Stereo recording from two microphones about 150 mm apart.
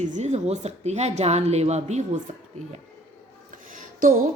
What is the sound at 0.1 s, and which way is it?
Speech, 50° right (ahead or behind).